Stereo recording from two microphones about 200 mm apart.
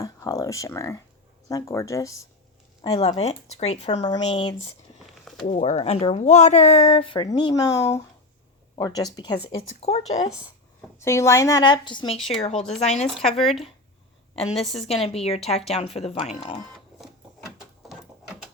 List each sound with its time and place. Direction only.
0.0 s a sound: 15° left (ahead or behind)
1.5 s a woman's voice: 15° left (ahead or behind)
2.8 s speech: 25° left (ahead or behind)
5.5 s speech: 35° left (ahead or behind); by 9.4 s 20° left (ahead or behind)
9.5 s speech: 30° left (ahead or behind)
11.0 s a woman's voice: 15° left (ahead or behind); by 13.1 s 35° left (ahead or behind)
13.2 s speech: centre (ahead or behind)
14.3 s speech: 30° left (ahead or behind)
14.6 s speech: centre (ahead or behind)
14.8 s speech: 30° left (ahead or behind)